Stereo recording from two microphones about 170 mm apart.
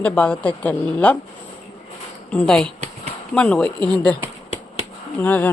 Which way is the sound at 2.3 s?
5° left (ahead or behind).